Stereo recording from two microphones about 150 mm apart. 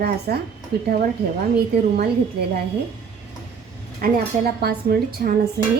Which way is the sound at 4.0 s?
90° right.